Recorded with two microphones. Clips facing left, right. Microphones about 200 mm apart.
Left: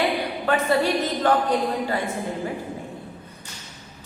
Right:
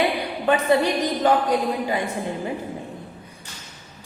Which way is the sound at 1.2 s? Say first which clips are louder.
Right 2 dB; 10° right (ahead or behind).